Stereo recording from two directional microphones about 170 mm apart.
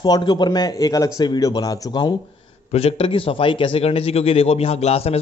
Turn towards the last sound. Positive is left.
turn(degrees=35)  # may be behind; listen again after turning